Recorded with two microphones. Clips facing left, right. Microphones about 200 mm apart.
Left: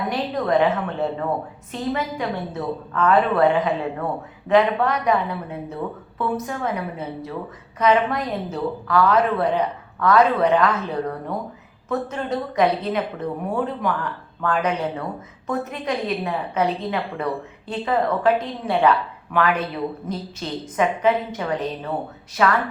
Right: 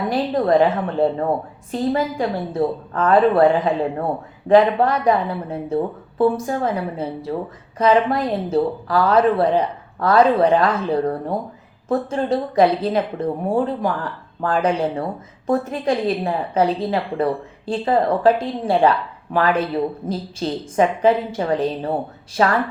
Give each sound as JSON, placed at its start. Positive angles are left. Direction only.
{"t": 0.1, "sound": "a woman's voice", "side_deg": -30}